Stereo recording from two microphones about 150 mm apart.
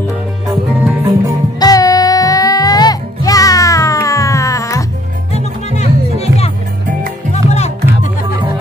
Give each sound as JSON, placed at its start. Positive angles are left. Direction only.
{"t": 1.0, "sound": "music", "side_deg": -25}
{"t": 1.6, "sound": "music", "side_deg": 25}
{"t": 5.3, "sound": "music", "side_deg": 50}